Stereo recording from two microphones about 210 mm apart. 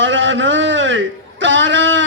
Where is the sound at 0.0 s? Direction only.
60° right (ahead or behind).